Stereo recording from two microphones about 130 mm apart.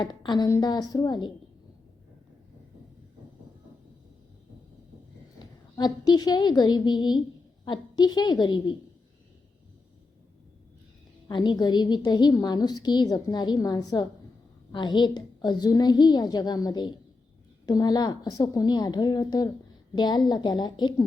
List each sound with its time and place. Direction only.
0.0 s a woman's voice: 35° left (ahead or behind)
5.4 s a woman's voice: 30° left (ahead or behind)
11.3 s a woman's voice: 35° left (ahead or behind)